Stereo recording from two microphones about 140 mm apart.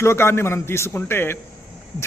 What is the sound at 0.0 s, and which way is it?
A man's voice, 20° left (ahead or behind).